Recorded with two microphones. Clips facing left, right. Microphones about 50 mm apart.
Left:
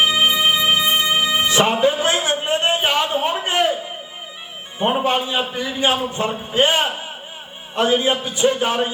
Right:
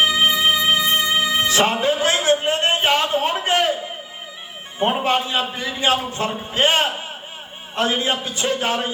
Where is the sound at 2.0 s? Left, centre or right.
Left.